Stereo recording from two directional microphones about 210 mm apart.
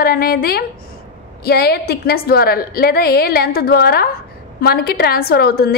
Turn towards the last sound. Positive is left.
turn(degrees=45)  # may be behind; listen again after turning